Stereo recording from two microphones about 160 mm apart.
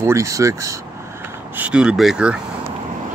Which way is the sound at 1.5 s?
5° right (ahead or behind).